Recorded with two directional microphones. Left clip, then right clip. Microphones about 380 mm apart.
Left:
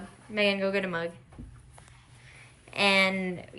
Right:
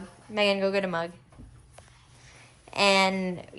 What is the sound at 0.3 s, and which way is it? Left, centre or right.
Speech, centre.